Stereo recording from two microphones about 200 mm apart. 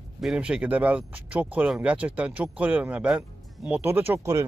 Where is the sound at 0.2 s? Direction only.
5° right (ahead or behind).